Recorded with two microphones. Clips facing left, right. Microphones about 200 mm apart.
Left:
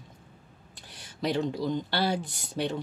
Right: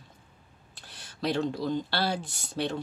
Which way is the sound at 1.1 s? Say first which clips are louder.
Even; 15° left (ahead or behind).